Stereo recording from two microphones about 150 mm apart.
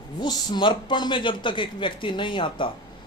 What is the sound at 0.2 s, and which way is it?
A man's voice, 30° left (ahead or behind).